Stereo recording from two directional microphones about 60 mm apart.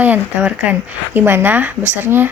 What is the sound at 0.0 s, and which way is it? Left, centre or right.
Speech, right.